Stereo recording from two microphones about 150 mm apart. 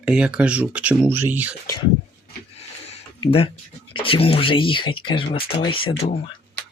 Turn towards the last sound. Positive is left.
turn(degrees=40)  # may be behind; listen again after turning